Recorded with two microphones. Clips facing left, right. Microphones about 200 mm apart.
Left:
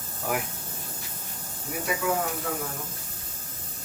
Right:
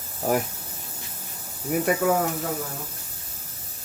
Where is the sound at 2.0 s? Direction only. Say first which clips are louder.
Right 4 dB; 40° right (ahead or behind).